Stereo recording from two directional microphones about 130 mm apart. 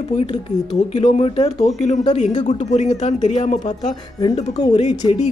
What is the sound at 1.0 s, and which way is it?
A woman's voice, 40° left (ahead or behind).